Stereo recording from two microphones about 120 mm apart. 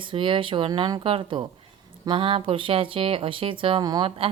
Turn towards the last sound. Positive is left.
turn(degrees=-50)  # may be behind; listen again after turning